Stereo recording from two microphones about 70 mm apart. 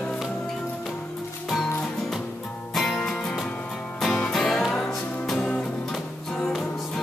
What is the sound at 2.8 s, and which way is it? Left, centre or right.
Music, centre.